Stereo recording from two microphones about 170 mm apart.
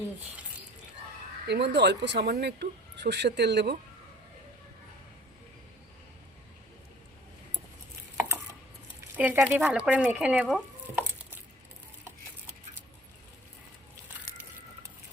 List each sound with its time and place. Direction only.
1.5 s speech: 85° right
8.1 s a sound: 15° right (ahead or behind)
9.1 s speech: 10° right (ahead or behind)